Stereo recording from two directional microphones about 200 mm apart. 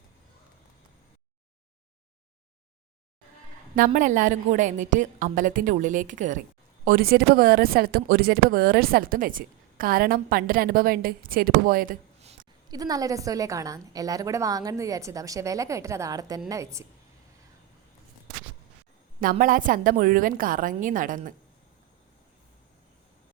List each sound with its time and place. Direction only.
3.8 s a woman's voice: 40° right (ahead or behind)
12.7 s a woman's voice: 20° right (ahead or behind)
19.2 s speech: 45° right (ahead or behind)